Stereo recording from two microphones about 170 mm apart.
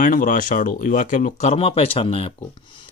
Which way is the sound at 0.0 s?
50° left (ahead or behind).